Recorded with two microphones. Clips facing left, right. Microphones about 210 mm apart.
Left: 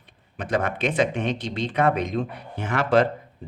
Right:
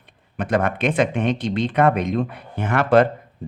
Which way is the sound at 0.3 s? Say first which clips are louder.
Right 4 dB; 55° right (ahead or behind).